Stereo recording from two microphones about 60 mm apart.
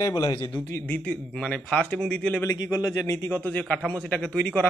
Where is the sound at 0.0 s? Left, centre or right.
Left.